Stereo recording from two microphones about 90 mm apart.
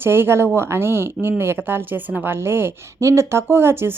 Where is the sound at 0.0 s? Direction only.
25° right (ahead or behind).